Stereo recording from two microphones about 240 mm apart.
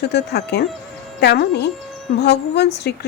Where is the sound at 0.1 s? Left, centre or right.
Left.